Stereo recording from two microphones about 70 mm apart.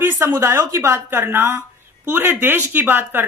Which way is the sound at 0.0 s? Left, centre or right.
Right.